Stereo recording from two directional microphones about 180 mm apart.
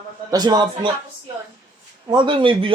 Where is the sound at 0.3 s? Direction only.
20° right (ahead or behind).